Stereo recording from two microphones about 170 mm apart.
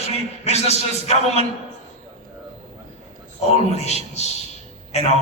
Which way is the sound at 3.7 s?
40° left (ahead or behind).